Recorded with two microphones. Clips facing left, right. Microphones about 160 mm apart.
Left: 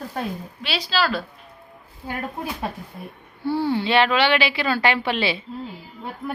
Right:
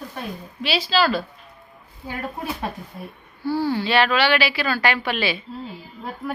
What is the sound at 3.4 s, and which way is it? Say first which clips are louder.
Speech: even; 25° left (ahead or behind).